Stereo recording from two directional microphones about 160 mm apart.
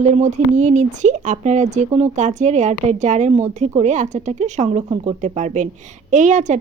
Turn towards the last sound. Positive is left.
turn(degrees=-50)  # may be behind; listen again after turning